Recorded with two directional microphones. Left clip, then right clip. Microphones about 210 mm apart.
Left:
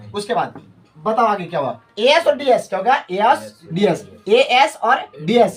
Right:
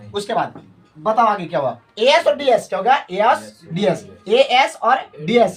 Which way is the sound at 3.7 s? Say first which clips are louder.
Left 1 dB; 10° right (ahead or behind).